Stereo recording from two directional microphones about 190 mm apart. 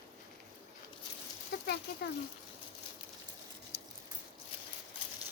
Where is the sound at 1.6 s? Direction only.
60° left (ahead or behind).